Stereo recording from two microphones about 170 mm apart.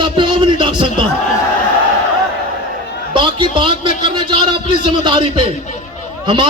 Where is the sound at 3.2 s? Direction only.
30° right (ahead or behind).